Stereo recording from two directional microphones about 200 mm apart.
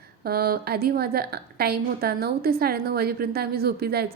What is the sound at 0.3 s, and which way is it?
A woman's voice, 50° right (ahead or behind).